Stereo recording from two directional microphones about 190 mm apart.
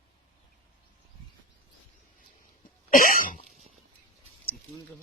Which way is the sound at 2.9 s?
45° left (ahead or behind).